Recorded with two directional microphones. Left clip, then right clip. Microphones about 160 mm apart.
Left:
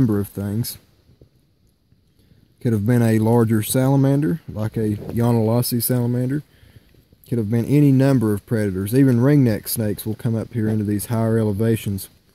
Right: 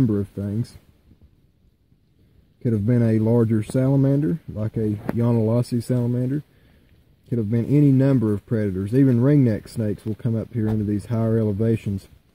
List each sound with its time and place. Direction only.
0.0 s speech: 20° left (ahead or behind)
2.6 s speech: 20° left (ahead or behind)